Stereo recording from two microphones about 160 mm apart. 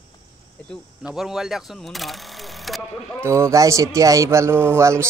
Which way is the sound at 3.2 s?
15° right (ahead or behind).